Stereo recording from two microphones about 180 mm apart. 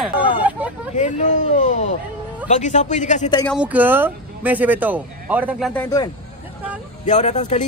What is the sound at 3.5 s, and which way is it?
Speech, 10° right (ahead or behind).